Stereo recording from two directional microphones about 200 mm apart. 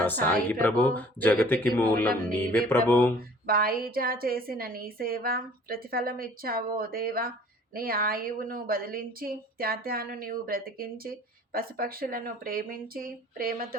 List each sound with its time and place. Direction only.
0.0 s speech: 10° left (ahead or behind)
3.2 s a woman's voice: 45° right (ahead or behind)